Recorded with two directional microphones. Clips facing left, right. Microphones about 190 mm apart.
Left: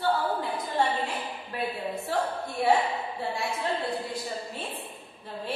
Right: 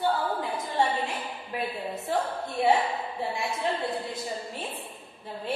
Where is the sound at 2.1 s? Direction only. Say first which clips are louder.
Right 2 dB; 20° right (ahead or behind).